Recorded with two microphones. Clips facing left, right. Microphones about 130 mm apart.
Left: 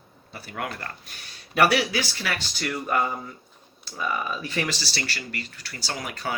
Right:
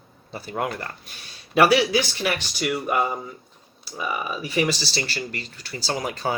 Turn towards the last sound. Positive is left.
turn(degrees=-25)  # may be behind; listen again after turning